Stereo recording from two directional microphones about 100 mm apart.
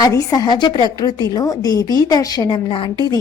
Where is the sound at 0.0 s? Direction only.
40° left (ahead or behind).